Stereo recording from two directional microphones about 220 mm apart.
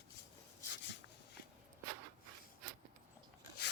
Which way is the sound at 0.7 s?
55° left (ahead or behind).